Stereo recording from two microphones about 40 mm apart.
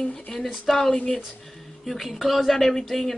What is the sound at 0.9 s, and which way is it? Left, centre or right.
Speech, left.